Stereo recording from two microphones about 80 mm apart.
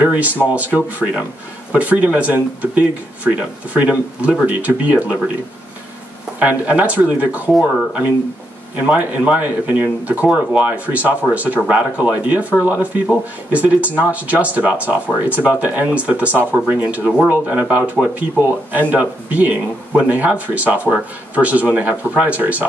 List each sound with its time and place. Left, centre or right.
0.0 s speech: centre
6.4 s speech: centre
8.7 s speech: centre